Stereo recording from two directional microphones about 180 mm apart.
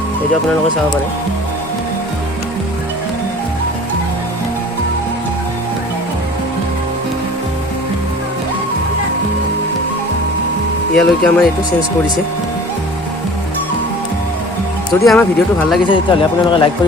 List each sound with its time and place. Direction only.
10.9 s speech: 5° left (ahead or behind)
15.0 s speech: 5° left (ahead or behind)
15.9 s speech: 25° left (ahead or behind)